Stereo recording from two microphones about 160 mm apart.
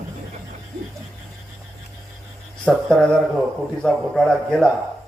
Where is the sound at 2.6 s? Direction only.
5° left (ahead or behind).